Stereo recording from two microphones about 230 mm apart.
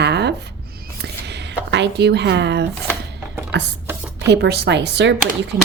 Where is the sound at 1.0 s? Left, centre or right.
Right.